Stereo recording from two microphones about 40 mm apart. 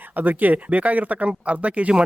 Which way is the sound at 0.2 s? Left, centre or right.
Right.